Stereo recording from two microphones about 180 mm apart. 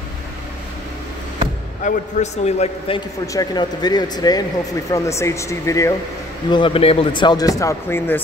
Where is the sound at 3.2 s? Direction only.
20° left (ahead or behind).